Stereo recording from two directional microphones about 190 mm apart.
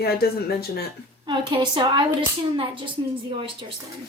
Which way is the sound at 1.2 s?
25° right (ahead or behind).